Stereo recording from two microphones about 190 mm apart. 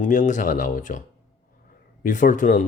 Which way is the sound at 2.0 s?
45° left (ahead or behind).